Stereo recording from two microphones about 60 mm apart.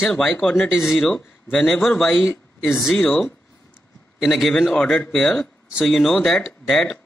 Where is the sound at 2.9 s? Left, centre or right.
Centre.